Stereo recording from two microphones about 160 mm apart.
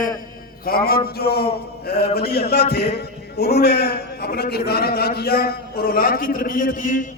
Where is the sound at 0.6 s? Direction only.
70° left (ahead or behind).